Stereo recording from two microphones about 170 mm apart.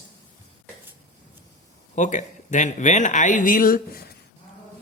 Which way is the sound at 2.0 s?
45° left (ahead or behind).